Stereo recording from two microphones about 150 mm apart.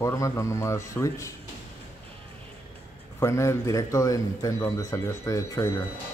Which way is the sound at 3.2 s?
20° left (ahead or behind).